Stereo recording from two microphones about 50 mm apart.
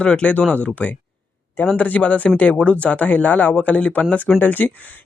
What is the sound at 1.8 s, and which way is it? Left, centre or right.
A man's voice, left.